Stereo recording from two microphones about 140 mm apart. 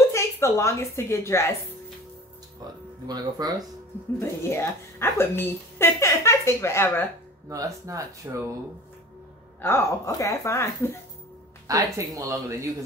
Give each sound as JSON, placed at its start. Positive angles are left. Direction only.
{"t": 0.1, "sound": "a woman's voice", "side_deg": 20}
{"t": 2.6, "sound": "speech", "side_deg": -30}
{"t": 4.2, "sound": "a woman's voice", "side_deg": 15}
{"t": 7.4, "sound": "speech", "side_deg": -25}
{"t": 9.6, "sound": "speech", "side_deg": 20}
{"t": 11.6, "sound": "speech", "side_deg": -25}